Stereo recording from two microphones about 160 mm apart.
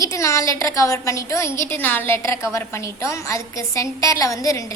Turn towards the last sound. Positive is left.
turn(degrees=20)  # may be behind; listen again after turning